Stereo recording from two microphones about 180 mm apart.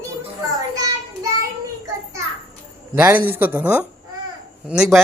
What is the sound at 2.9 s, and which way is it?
Speech, 10° right (ahead or behind).